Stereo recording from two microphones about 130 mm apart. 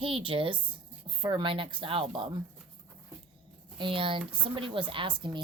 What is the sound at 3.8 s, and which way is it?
Speech, 40° right (ahead or behind).